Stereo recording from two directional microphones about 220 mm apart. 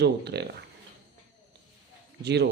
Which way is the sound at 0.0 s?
45° right (ahead or behind).